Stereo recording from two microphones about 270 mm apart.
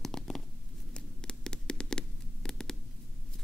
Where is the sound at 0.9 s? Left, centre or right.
Centre.